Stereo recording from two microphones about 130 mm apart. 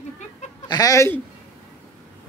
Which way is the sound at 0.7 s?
30° left (ahead or behind).